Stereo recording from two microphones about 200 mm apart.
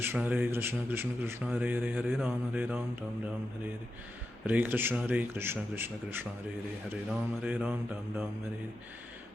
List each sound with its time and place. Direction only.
0.0 s speech: 10° right (ahead or behind)
4.4 s speech: 10° right (ahead or behind)